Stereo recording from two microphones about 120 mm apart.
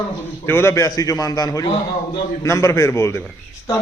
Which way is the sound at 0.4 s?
20° left (ahead or behind).